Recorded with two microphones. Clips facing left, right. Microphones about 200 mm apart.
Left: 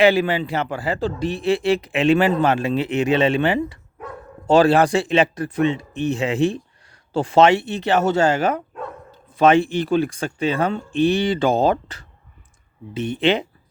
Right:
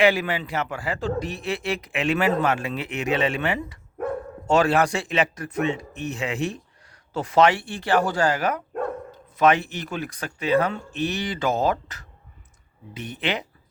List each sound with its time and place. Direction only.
0.0 s speech: 30° left (ahead or behind)